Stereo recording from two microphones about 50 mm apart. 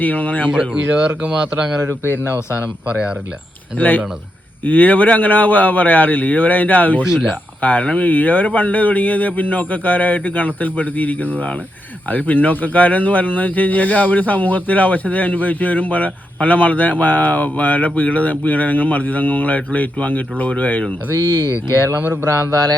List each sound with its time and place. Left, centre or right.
0.0 s speech: left
0.4 s speech: centre
2.0 s speech: left
2.8 s speech: right
3.8 s speech: left
7.0 s speech: centre
7.6 s speech: left